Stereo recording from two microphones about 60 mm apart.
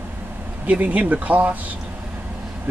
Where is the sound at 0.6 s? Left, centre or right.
Right.